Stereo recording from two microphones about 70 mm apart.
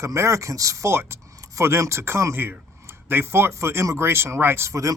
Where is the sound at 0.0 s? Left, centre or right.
Right.